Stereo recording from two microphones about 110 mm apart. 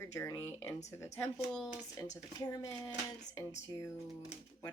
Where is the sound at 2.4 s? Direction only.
30° left (ahead or behind).